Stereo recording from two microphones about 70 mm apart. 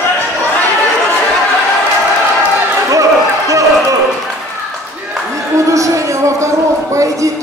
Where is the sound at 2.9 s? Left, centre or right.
Right.